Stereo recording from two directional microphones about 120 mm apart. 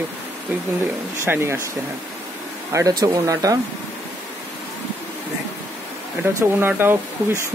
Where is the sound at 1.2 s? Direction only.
20° right (ahead or behind).